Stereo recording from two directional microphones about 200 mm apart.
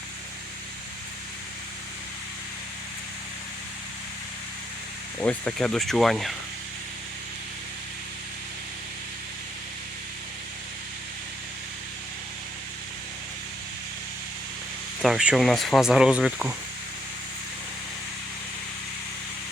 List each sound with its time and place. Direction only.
5.2 s speech: 5° left (ahead or behind)
15.0 s speech: 5° right (ahead or behind)